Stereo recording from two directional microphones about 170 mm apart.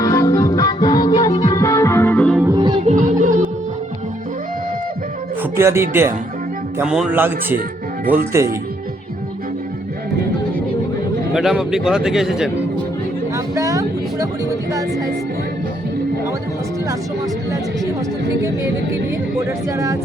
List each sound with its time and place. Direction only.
0.0 s music: 20° left (ahead or behind)
2.5 s music: 25° right (ahead or behind)
2.8 s music: 50° right (ahead or behind)
5.4 s music: 15° right (ahead or behind)
5.9 s speech: 15° right (ahead or behind)
11.3 s speech: 5° right (ahead or behind)
13.3 s a sound: 20° right (ahead or behind)
19.5 s speech: 20° right (ahead or behind)